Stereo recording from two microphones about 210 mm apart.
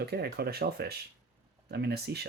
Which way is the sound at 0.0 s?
50° right (ahead or behind).